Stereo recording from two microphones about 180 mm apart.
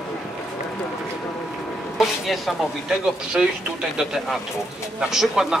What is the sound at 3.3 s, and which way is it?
A man's voice, 5° right (ahead or behind).